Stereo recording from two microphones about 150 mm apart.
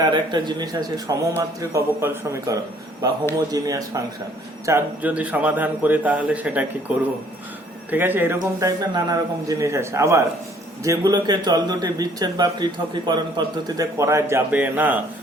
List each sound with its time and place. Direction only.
0.0 s a man's voice: 30° right (ahead or behind); by 15.0 s 10° right (ahead or behind)